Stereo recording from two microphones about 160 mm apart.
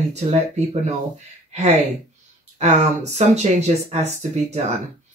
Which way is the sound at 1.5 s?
45° right (ahead or behind).